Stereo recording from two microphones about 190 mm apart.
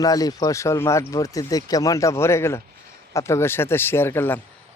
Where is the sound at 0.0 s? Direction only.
20° left (ahead or behind).